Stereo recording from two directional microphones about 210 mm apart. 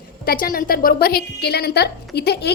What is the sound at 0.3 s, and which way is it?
A woman's voice, 45° left (ahead or behind).